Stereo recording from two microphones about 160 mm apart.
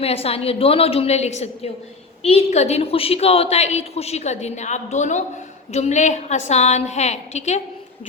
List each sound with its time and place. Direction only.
0.0 s a woman's voice: 40° left (ahead or behind)